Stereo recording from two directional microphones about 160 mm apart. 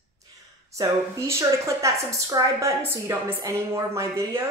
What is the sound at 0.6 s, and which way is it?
A woman's voice, 20° right (ahead or behind).